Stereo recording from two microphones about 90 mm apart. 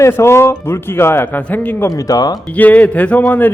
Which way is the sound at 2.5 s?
15° left (ahead or behind).